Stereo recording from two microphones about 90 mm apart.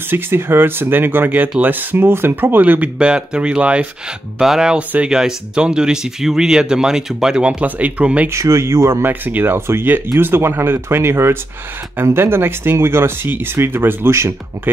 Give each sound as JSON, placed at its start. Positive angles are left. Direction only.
{"t": 0.1, "sound": "speech", "side_deg": -25}
{"t": 8.3, "sound": "speech", "side_deg": -35}